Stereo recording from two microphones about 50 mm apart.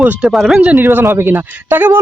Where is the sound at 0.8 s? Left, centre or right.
Right.